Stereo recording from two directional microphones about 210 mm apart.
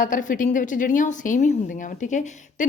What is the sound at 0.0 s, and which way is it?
Speech, 40° left (ahead or behind).